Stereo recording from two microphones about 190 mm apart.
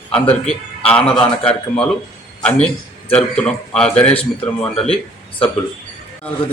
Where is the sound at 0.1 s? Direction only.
30° left (ahead or behind).